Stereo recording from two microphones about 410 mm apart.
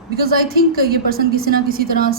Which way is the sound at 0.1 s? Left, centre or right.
Right.